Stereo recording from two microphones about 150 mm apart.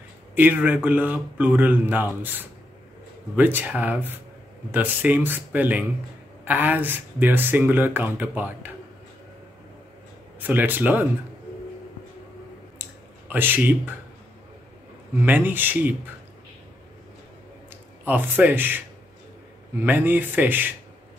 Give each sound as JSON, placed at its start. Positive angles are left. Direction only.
{"t": 0.4, "sound": "speech", "side_deg": -10}
{"t": 10.4, "sound": "speech", "side_deg": -10}
{"t": 13.3, "sound": "speech", "side_deg": -10}
{"t": 15.2, "sound": "speech", "side_deg": -10}
{"t": 18.0, "sound": "speech", "side_deg": -10}
{"t": 19.8, "sound": "speech", "side_deg": -10}